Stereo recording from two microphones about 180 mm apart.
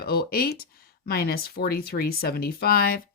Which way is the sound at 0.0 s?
60° left (ahead or behind).